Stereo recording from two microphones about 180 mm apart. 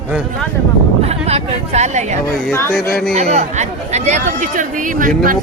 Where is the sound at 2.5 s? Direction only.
15° left (ahead or behind).